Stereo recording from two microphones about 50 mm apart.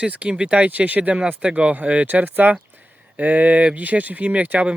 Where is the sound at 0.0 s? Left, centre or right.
Right.